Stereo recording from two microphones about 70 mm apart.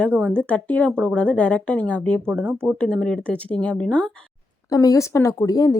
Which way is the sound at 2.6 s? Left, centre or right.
Centre.